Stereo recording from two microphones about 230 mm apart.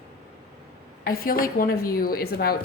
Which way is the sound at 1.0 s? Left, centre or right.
Left.